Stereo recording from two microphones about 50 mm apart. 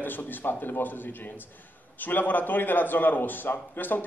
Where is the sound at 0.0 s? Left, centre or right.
Left.